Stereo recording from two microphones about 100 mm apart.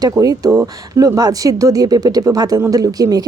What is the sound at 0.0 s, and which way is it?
Speech, 35° right (ahead or behind).